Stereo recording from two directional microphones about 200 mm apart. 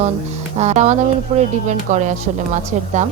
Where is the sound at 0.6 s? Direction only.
35° right (ahead or behind).